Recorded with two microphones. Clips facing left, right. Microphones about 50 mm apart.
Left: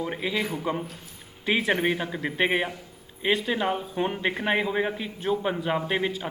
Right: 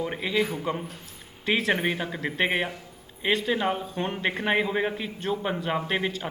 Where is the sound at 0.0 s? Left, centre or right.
Centre.